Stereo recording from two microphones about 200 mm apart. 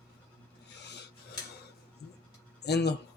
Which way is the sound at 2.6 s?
55° left (ahead or behind).